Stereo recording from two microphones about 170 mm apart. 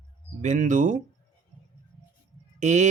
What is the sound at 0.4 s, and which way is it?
Speech, 45° right (ahead or behind).